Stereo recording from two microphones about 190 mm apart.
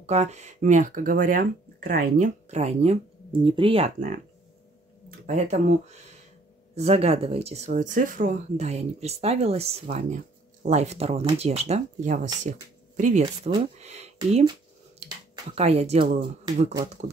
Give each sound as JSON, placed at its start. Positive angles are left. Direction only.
{"t": 0.0, "sound": "speech", "side_deg": -35}
{"t": 5.2, "sound": "speech", "side_deg": -40}
{"t": 13.7, "sound": "a sound", "side_deg": -35}
{"t": 15.5, "sound": "speech", "side_deg": -35}